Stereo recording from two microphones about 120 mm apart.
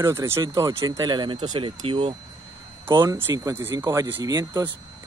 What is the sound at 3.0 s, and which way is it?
Speech, 20° right (ahead or behind).